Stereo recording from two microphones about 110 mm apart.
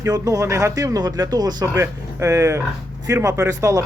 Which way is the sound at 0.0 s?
30° right (ahead or behind).